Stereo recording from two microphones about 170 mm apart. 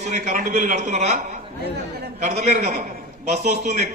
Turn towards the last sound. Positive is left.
turn(degrees=-40)  # may be behind; listen again after turning